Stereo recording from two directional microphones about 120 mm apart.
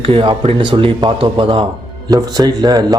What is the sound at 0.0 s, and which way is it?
Speech, 45° right (ahead or behind).